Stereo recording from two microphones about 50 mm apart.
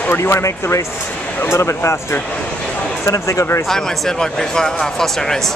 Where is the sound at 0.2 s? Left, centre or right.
Left.